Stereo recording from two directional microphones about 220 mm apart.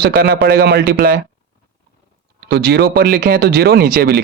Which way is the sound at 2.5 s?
45° right (ahead or behind).